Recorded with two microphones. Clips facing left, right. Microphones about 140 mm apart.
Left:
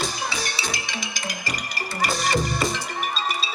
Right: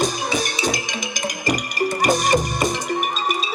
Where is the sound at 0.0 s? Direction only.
20° right (ahead or behind).